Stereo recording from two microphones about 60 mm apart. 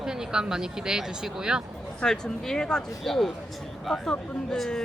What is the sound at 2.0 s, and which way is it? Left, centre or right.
A woman's voice, centre.